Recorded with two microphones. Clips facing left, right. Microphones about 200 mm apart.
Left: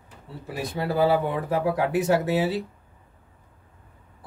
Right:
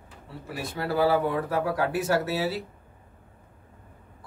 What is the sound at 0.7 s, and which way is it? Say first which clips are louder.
Speech: left 2 dB; 20° left (ahead or behind).